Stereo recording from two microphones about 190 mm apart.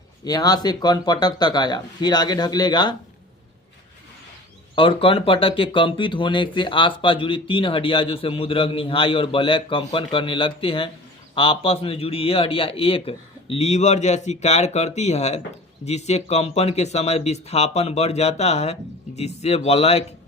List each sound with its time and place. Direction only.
0.3 s speech: 20° left (ahead or behind)
4.7 s a man's voice: 25° left (ahead or behind)